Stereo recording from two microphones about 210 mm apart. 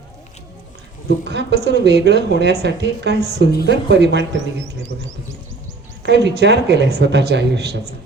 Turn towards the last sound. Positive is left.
turn(degrees=-50)  # may be behind; listen again after turning